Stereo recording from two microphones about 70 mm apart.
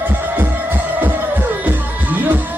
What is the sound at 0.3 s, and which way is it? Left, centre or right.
Music, right.